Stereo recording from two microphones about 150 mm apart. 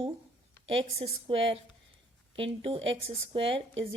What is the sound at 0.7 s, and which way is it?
Speech, 40° right (ahead or behind).